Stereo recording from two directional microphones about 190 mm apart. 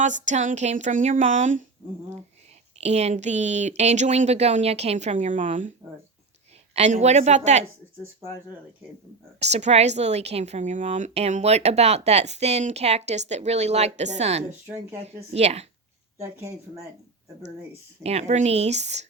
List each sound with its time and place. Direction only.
0.0 s a woman's voice: 40° right (ahead or behind)
2.7 s a woman's voice: 35° right (ahead or behind)
6.7 s a woman's voice: 35° right (ahead or behind)
9.4 s a woman's voice: 35° right (ahead or behind)
16.1 s speech: 15° right (ahead or behind)
18.0 s a woman's voice: 35° right (ahead or behind)